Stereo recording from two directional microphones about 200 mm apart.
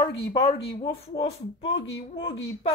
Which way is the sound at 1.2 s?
60° left (ahead or behind).